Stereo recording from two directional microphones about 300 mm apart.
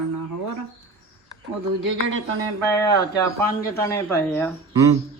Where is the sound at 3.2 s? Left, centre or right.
Centre.